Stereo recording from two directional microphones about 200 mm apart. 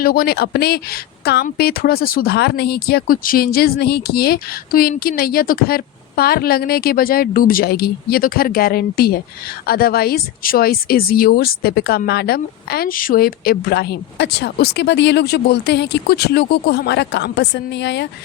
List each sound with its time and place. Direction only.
0.0 s speech: 45° left (ahead or behind)